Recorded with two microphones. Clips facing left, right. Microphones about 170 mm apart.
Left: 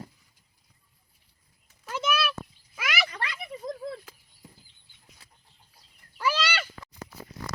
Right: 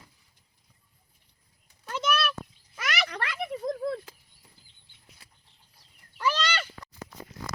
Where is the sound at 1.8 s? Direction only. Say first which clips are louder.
Even; 5° left (ahead or behind).